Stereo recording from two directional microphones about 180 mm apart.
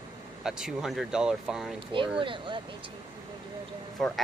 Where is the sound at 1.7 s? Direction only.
30° right (ahead or behind).